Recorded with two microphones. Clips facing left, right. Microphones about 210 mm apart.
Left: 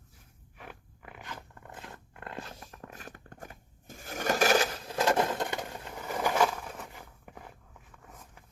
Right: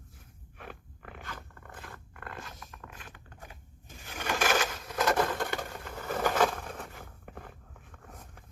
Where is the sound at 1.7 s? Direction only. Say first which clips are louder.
Left 1 dB; 25° left (ahead or behind).